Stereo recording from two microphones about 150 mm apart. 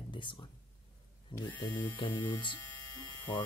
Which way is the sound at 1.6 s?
30° left (ahead or behind).